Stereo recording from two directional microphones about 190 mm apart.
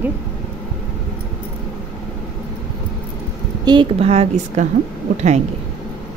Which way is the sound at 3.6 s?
30° right (ahead or behind).